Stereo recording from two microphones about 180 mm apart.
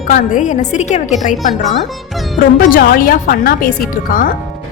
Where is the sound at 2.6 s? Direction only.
50° left (ahead or behind).